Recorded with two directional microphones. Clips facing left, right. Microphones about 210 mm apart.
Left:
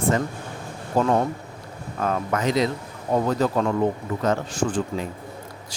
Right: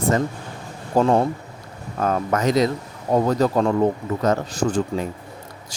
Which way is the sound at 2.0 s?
40° right (ahead or behind).